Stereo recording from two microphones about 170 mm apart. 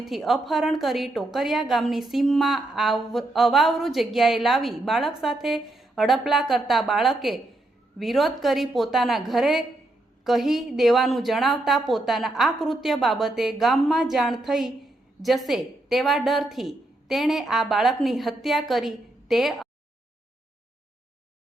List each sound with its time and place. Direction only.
0.1 s a woman's voice: centre (ahead or behind)